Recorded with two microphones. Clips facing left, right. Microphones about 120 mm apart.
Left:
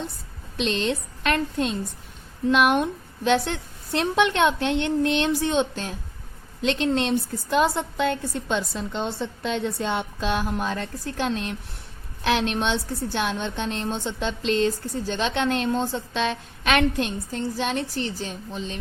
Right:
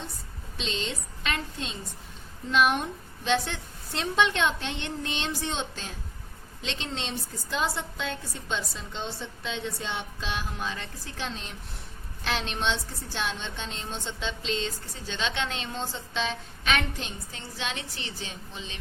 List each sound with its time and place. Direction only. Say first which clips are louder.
0.5 s a woman's voice: left 9 dB; 60° left (ahead or behind); by 18.8 s 40° left (ahead or behind)